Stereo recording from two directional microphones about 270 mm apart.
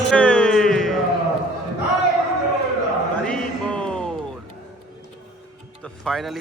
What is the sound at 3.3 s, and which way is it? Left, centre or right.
Mantra, centre.